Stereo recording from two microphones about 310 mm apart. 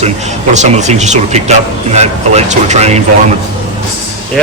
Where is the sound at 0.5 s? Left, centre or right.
Right.